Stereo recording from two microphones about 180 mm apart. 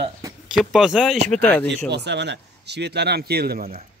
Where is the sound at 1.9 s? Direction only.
70° right (ahead or behind).